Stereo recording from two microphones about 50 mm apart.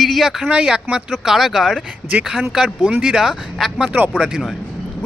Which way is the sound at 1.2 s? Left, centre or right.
Centre.